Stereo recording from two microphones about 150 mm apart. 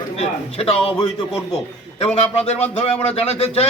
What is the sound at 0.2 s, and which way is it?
A man's voice, 40° left (ahead or behind).